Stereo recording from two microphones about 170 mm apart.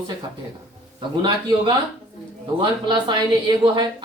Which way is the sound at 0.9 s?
30° right (ahead or behind).